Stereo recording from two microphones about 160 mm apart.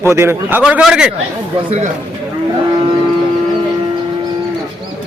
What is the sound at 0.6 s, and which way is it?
Speech, 5° right (ahead or behind).